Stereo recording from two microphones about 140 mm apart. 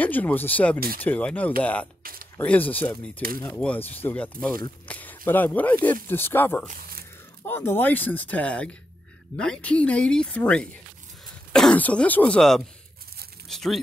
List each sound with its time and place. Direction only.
0.0 s speech: 10° left (ahead or behind)
0.7 s speech: 90° right
1.0 s speech: 10° left (ahead or behind)
13.5 s a sound: centre (ahead or behind)